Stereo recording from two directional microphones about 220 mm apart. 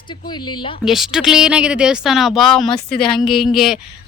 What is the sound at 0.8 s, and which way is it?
Speech, centre (ahead or behind).